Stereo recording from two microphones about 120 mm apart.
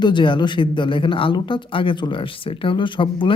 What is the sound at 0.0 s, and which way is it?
Speech, 40° left (ahead or behind).